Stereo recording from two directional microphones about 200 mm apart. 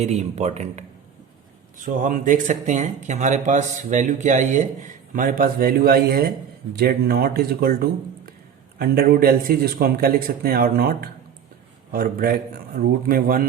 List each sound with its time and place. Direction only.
0.0 s speech: 30° right (ahead or behind)